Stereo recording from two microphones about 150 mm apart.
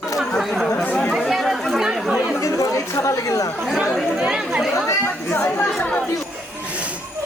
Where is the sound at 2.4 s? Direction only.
20° left (ahead or behind).